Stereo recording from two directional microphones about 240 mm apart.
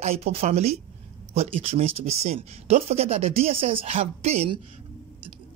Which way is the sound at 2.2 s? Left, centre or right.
Right.